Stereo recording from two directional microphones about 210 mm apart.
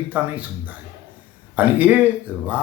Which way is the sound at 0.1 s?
5° right (ahead or behind).